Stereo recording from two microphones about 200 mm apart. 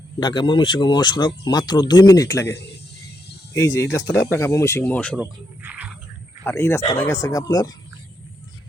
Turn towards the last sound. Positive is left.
turn(degrees=15)  # may be behind; listen again after turning